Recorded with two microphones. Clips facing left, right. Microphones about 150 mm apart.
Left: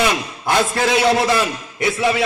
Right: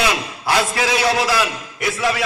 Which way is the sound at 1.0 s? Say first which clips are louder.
Left 3 dB; 25° left (ahead or behind).